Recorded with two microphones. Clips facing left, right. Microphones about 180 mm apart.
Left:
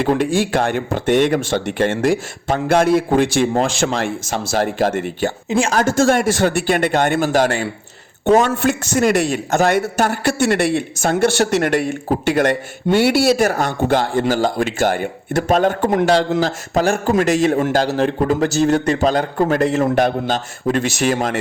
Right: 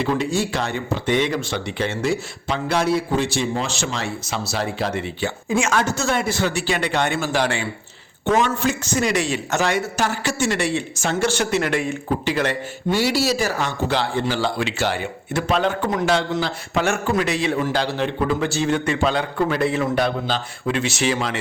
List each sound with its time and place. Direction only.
0.0 s a man's voice: 50° left (ahead or behind)
5.5 s speech: 35° left (ahead or behind)
6.0 s a man's voice: 50° left (ahead or behind)
8.4 s a man's voice: 60° left (ahead or behind)